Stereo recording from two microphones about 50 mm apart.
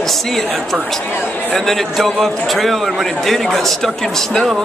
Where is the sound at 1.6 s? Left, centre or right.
Centre.